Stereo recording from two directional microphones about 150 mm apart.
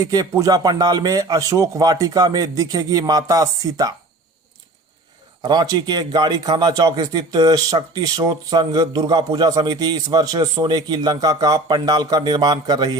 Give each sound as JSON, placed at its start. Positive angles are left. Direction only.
{"t": 0.0, "sound": "a man's voice", "side_deg": -25}
{"t": 5.4, "sound": "a man's voice", "side_deg": -25}